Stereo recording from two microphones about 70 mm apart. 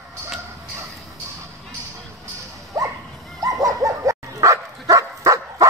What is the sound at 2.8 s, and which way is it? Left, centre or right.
Dog, right.